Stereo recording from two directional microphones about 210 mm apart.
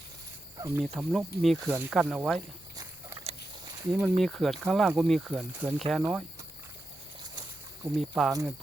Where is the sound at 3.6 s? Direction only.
20° right (ahead or behind).